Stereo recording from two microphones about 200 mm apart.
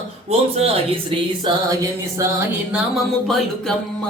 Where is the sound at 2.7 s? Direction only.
Centre (ahead or behind).